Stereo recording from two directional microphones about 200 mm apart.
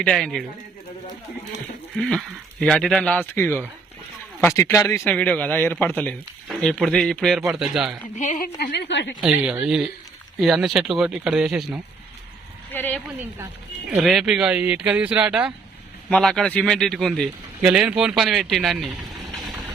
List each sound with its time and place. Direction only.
0.0 s speech: centre (ahead or behind)
2.0 s speech: 5° left (ahead or behind)
8.1 s a woman's voice: 40° left (ahead or behind)
8.7 s a woman's voice: 60° left (ahead or behind)
9.2 s speech: 5° right (ahead or behind)
12.7 s speech: 10° left (ahead or behind)
13.9 s speech: centre (ahead or behind)